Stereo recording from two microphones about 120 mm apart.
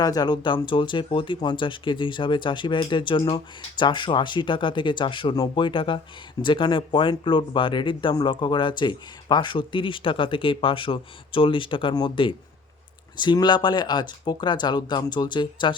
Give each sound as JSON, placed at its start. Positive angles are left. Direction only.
{"t": 0.0, "sound": "speech", "side_deg": 35}